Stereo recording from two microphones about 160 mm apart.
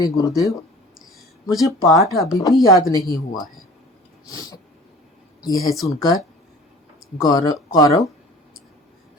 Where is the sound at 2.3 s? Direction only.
20° left (ahead or behind).